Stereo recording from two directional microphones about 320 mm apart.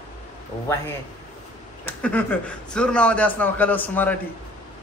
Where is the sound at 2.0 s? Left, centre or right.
Centre.